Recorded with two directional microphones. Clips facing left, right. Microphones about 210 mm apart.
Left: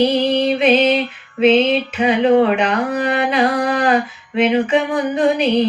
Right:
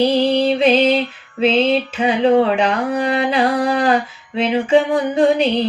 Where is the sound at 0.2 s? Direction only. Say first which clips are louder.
Right 1 dB; 30° right (ahead or behind).